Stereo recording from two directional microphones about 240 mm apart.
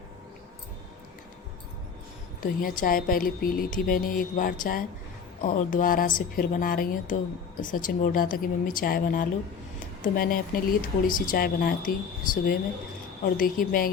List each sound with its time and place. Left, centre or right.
2.4 s a woman's voice: left